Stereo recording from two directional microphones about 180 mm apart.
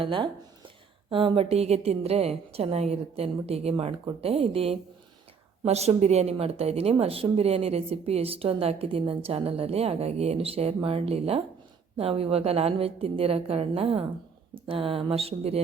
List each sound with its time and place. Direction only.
0.0 s a woman's voice: 30° right (ahead or behind)